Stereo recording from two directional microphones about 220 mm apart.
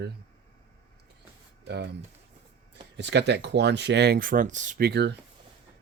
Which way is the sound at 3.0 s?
50° right (ahead or behind).